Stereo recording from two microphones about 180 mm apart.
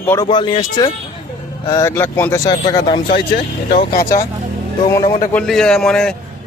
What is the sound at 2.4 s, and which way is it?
Speech, 25° left (ahead or behind).